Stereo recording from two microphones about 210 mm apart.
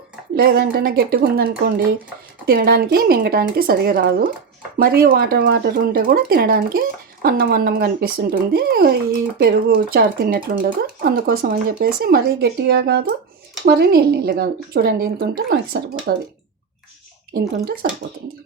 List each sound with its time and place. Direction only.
0.3 s speech: 50° right (ahead or behind)
17.8 s speech: 45° right (ahead or behind)